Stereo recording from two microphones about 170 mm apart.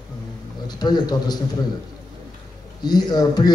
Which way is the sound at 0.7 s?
25° left (ahead or behind).